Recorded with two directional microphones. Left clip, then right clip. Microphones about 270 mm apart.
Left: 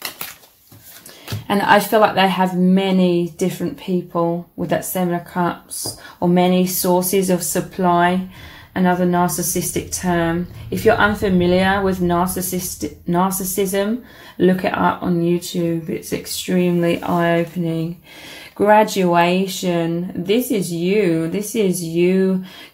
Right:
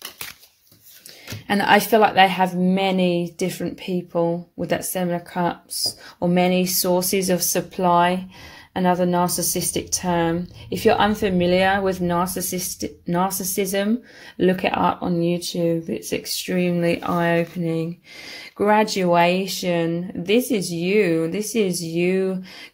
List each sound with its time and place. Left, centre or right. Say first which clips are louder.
1.5 s a woman's voice: left 2 dB; right